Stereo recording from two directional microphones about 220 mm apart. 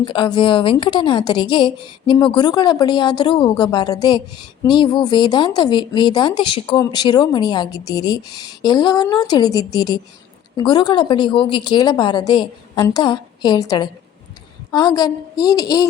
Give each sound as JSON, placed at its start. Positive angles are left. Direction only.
{"t": 0.0, "sound": "a woman's voice", "side_deg": 20}